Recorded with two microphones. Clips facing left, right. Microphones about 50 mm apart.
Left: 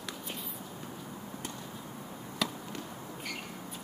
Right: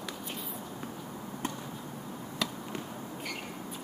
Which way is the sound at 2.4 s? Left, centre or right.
Centre.